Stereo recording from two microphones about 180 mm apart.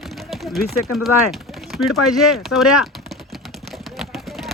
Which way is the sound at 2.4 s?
Centre (ahead or behind).